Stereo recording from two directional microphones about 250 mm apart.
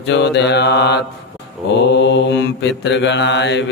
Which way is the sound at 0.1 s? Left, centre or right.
Left.